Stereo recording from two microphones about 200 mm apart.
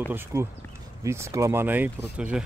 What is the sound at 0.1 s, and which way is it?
Speech, 10° right (ahead or behind).